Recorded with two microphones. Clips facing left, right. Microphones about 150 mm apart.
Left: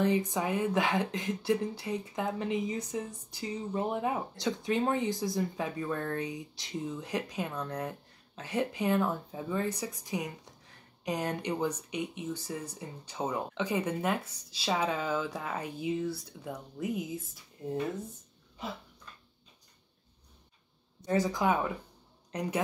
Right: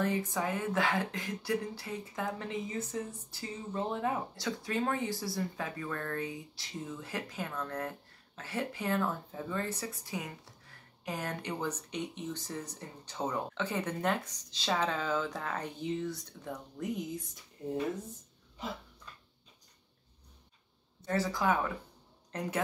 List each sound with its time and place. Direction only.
0.0 s speech: 20° left (ahead or behind)
21.0 s speech: 15° left (ahead or behind)